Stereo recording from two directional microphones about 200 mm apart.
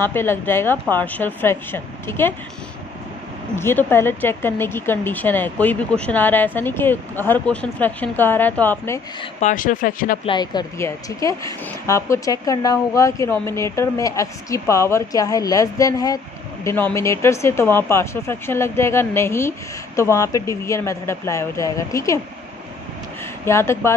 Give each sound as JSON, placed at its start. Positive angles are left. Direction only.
{"t": 0.0, "sound": "speech", "side_deg": 10}
{"t": 3.5, "sound": "speech", "side_deg": 10}
{"t": 9.2, "sound": "speech", "side_deg": 40}
{"t": 10.2, "sound": "speech", "side_deg": 20}
{"t": 23.4, "sound": "speech", "side_deg": 15}